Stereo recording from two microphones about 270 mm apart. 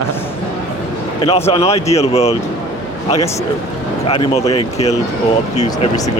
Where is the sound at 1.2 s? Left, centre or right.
Left.